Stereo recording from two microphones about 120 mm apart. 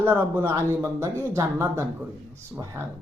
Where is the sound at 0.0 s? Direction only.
20° right (ahead or behind).